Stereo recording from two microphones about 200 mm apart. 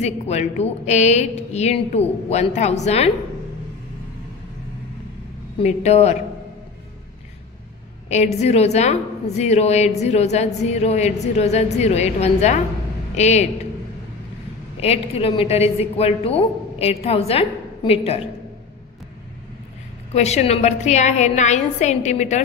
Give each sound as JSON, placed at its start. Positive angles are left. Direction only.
{"t": 0.0, "sound": "a woman's voice", "side_deg": 35}
{"t": 5.6, "sound": "a woman's voice", "side_deg": 35}
{"t": 8.1, "sound": "a woman's voice", "side_deg": 35}
{"t": 14.8, "sound": "a woman's voice", "side_deg": 30}
{"t": 20.1, "sound": "a woman's voice", "side_deg": 35}